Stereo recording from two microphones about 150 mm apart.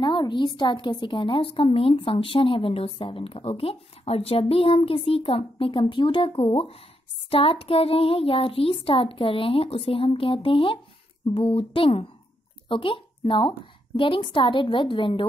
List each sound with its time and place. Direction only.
0.0 s a woman's voice: 30° left (ahead or behind)